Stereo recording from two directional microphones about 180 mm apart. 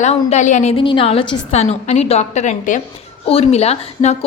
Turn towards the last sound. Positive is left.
turn(degrees=35)  # may be behind; listen again after turning